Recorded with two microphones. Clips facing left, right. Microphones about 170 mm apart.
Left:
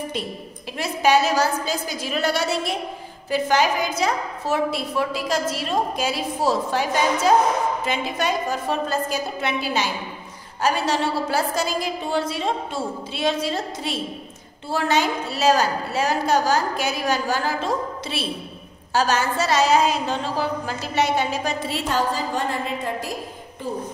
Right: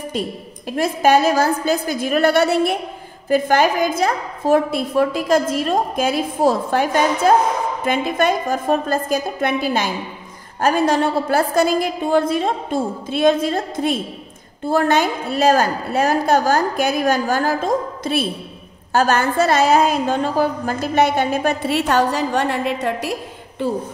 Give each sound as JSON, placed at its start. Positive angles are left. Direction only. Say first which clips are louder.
{"t": 0.7, "sound": "a woman's voice", "louder": "right 4 dB", "side_deg": -50}